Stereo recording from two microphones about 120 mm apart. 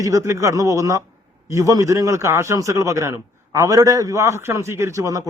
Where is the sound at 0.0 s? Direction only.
25° right (ahead or behind).